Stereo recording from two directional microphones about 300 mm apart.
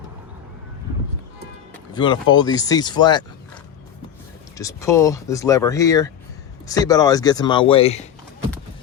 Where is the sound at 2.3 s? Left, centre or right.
Centre.